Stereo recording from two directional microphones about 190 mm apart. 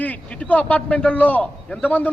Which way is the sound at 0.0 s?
10° left (ahead or behind).